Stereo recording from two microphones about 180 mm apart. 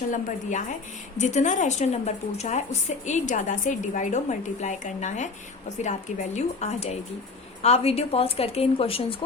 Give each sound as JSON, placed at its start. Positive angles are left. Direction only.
{"t": 0.1, "sound": "a woman's voice", "side_deg": 45}